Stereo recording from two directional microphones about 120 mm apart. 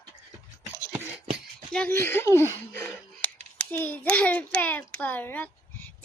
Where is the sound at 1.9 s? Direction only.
20° left (ahead or behind).